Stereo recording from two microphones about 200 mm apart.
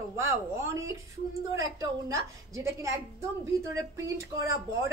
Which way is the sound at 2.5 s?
15° right (ahead or behind).